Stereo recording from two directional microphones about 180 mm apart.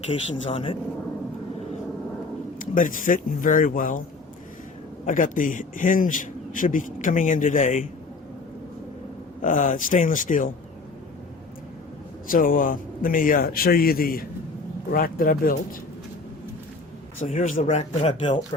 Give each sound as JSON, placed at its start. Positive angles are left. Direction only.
{"t": 0.1, "sound": "speech", "side_deg": 35}
{"t": 2.6, "sound": "a man's voice", "side_deg": 50}
{"t": 5.0, "sound": "a man's voice", "side_deg": 45}
{"t": 9.4, "sound": "a man's voice", "side_deg": 45}
{"t": 12.3, "sound": "a man's voice", "side_deg": 50}
{"t": 17.2, "sound": "speech", "side_deg": 45}